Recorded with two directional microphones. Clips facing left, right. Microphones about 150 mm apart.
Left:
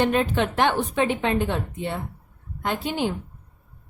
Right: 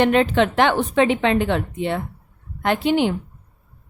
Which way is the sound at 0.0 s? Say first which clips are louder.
Right 5 dB; 85° right.